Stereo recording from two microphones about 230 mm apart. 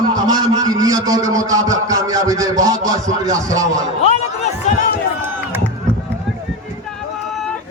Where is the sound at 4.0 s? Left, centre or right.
Left.